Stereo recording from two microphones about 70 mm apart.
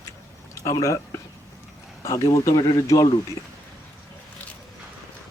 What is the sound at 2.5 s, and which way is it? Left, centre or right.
Speech, left.